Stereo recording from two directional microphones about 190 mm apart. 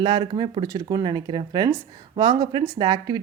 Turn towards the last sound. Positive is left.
turn(degrees=-20)  # may be behind; listen again after turning